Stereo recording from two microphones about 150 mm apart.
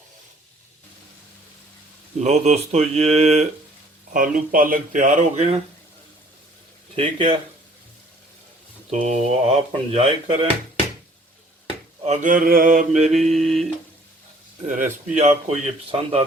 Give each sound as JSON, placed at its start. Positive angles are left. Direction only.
{"t": 2.1, "sound": "a man's voice", "side_deg": -50}
{"t": 4.1, "sound": "speech", "side_deg": -65}
{"t": 6.9, "sound": "speech", "side_deg": -35}
{"t": 8.9, "sound": "speech", "side_deg": -45}
{"t": 12.0, "sound": "speech", "side_deg": -55}
{"t": 13.3, "sound": "a sound", "side_deg": 0}
{"t": 14.7, "sound": "a man's voice", "side_deg": -55}